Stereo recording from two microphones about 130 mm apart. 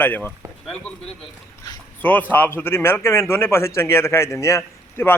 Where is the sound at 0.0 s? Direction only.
15° left (ahead or behind).